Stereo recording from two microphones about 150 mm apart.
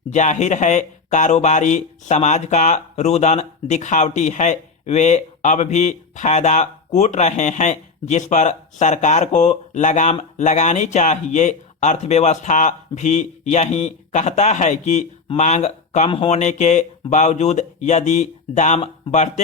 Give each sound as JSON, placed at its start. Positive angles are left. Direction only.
{"t": 0.1, "sound": "speech", "side_deg": 50}